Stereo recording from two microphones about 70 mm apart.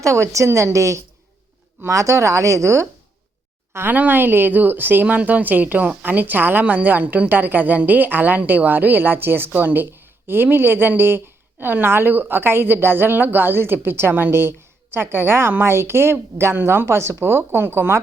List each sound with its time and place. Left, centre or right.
0.0 s a woman's voice: right